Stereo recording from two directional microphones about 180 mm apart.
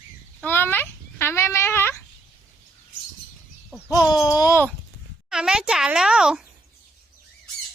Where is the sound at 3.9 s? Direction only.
20° left (ahead or behind).